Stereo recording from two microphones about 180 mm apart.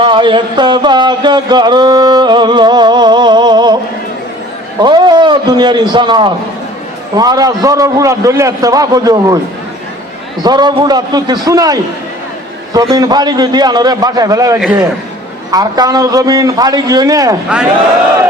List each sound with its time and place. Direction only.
0.0 s speech: 25° right (ahead or behind)
4.8 s speech: 25° right (ahead or behind)
10.4 s speech: 25° right (ahead or behind)